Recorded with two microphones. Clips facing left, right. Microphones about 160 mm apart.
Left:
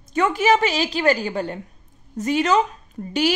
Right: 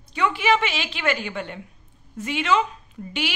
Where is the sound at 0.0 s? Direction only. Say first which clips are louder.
Left 4 dB; 45° left (ahead or behind).